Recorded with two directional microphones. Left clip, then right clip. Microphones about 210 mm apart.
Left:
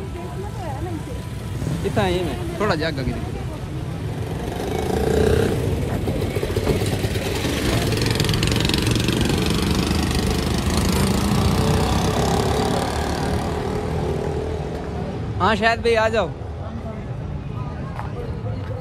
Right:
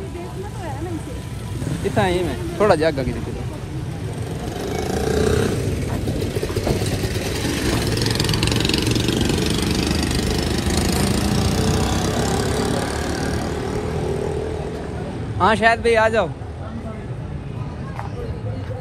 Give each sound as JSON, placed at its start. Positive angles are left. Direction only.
{"t": 2.0, "sound": "speech", "side_deg": 15}
{"t": 2.6, "sound": "speech", "side_deg": 0}
{"t": 5.0, "sound": "roar", "side_deg": -10}
{"t": 6.8, "sound": "vehicle", "side_deg": -20}
{"t": 9.5, "sound": "vehicle", "side_deg": 30}
{"t": 9.8, "sound": "vehicle", "side_deg": 10}
{"t": 10.7, "sound": "lawn mower", "side_deg": 15}
{"t": 11.6, "sound": "vehicle", "side_deg": 25}
{"t": 15.3, "sound": "speech", "side_deg": 15}